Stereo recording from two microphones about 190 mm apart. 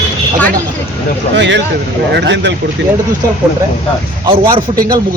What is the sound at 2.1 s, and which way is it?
Speech, 65° right (ahead or behind).